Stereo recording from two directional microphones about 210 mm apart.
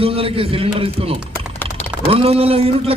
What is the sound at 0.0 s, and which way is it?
A man's voice, 25° right (ahead or behind).